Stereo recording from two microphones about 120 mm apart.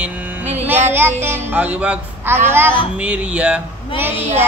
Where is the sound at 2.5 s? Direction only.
20° right (ahead or behind).